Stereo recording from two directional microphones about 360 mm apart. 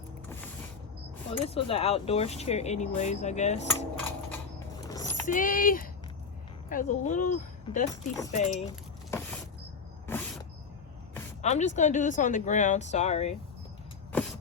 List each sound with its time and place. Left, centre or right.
1.3 s speech: centre
3.7 s cutlery: centre
5.2 s speech: left
8.3 s keys jangling: centre
10.1 s a sound: centre
11.4 s speech: centre
14.1 s vehicle: centre